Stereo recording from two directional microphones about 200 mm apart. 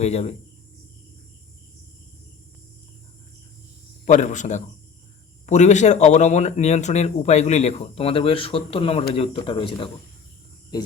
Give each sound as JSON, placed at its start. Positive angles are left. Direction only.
{"t": 0.0, "sound": "speech", "side_deg": 30}
{"t": 4.0, "sound": "speech", "side_deg": 40}